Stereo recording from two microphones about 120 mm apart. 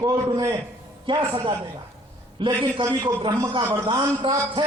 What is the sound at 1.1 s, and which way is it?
A man's voice, 40° right (ahead or behind).